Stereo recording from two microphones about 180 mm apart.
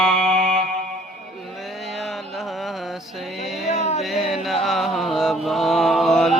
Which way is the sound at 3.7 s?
35° left (ahead or behind).